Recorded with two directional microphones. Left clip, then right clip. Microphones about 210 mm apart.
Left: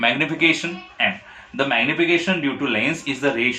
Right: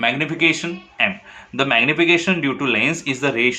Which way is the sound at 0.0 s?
20° right (ahead or behind).